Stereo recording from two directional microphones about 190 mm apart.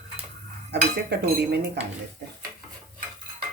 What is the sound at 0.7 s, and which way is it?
A woman's voice, 60° right (ahead or behind).